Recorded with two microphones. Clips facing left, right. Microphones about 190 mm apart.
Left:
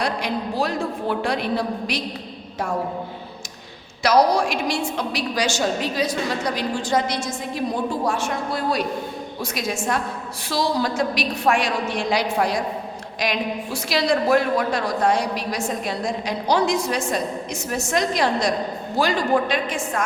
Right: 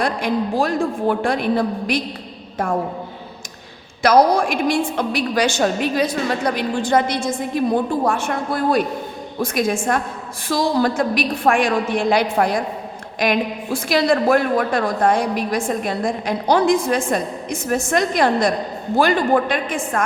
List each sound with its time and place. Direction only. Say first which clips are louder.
0.0 s a man's voice: right 4 dB; 50° right (ahead or behind)
4.0 s a woman's voice: right 3 dB; 55° right (ahead or behind)